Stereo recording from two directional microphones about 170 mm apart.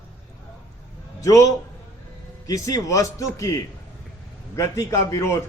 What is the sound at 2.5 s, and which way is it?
A man's voice, 20° left (ahead or behind).